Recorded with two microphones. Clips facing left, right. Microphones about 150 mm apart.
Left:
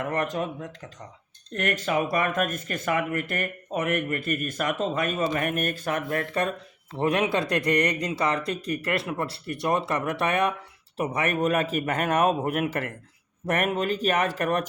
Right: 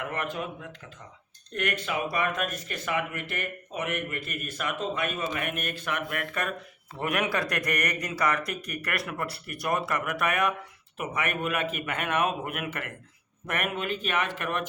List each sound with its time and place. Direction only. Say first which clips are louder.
0.0 s a man's voice: left 5 dB; 40° left (ahead or behind)